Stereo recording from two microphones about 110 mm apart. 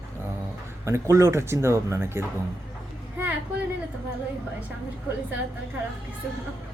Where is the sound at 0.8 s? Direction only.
25° right (ahead or behind).